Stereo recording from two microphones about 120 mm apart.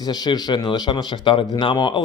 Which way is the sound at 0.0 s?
35° left (ahead or behind).